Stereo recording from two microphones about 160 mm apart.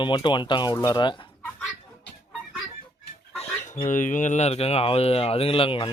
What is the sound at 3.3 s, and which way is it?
Chicken, 40° left (ahead or behind).